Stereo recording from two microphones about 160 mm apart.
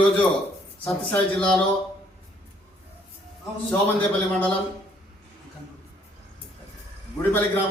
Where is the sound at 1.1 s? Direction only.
5° left (ahead or behind).